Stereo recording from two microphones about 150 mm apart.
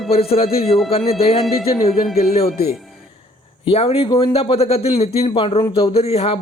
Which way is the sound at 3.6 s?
40° left (ahead or behind).